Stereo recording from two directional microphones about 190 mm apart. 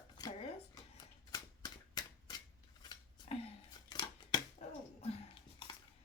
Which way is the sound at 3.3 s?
30° left (ahead or behind).